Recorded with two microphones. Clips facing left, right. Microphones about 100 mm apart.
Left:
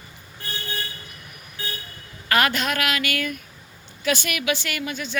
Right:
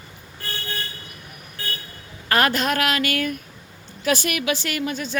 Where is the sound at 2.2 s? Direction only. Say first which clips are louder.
Right 1 dB; 35° right (ahead or behind).